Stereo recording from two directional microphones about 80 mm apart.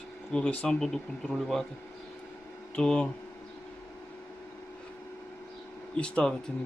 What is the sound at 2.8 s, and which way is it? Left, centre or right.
Speech, centre.